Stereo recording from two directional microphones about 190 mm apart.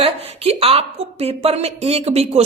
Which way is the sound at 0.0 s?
30° right (ahead or behind).